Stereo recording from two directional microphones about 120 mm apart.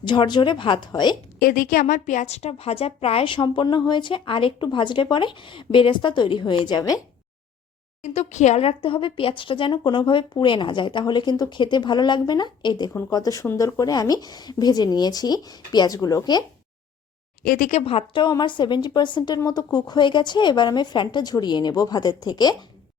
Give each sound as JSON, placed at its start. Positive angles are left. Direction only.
{"t": 0.0, "sound": "speech", "side_deg": 40}
{"t": 1.6, "sound": "a woman's voice", "side_deg": 90}
{"t": 8.0, "sound": "speech", "side_deg": 75}
{"t": 17.6, "sound": "speech", "side_deg": 70}